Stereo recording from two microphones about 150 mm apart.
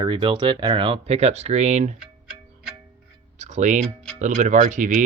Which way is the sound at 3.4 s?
55° right (ahead or behind).